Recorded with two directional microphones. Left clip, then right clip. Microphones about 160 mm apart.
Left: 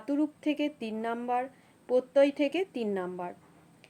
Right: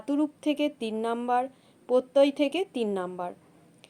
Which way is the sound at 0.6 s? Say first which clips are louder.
Right 4 dB; 25° right (ahead or behind).